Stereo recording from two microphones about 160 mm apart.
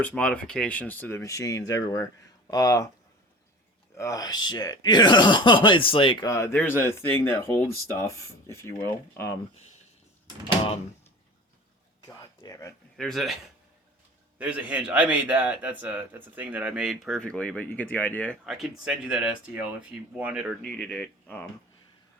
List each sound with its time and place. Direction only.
0.0 s speech: 10° left (ahead or behind)
3.9 s speech: 20° left (ahead or behind)
6.3 s speech: 15° left (ahead or behind)
12.0 s a sound: 20° left (ahead or behind)
13.0 s speech: centre (ahead or behind)
14.3 s a man's voice: 5° right (ahead or behind); by 18.3 s 10° left (ahead or behind)
18.4 s speech: centre (ahead or behind)
20.6 s speech: 5° left (ahead or behind)